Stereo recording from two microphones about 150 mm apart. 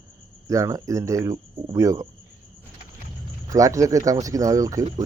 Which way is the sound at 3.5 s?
20° right (ahead or behind).